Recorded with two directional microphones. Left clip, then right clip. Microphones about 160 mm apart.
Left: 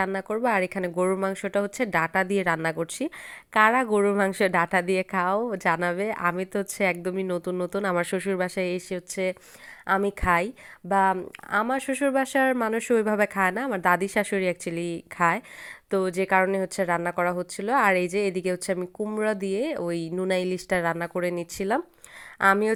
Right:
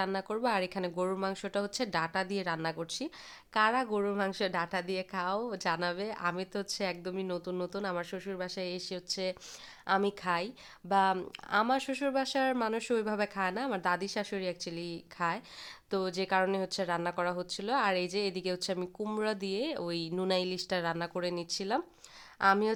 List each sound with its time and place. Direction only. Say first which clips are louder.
0.0 s a woman's voice: left 7 dB; 25° left (ahead or behind)
15.9 s a woman's voice: left 8 dB; 15° left (ahead or behind)